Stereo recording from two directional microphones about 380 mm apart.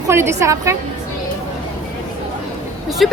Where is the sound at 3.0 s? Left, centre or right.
Centre.